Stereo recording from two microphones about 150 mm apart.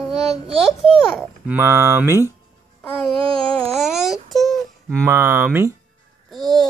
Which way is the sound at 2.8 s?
10° left (ahead or behind).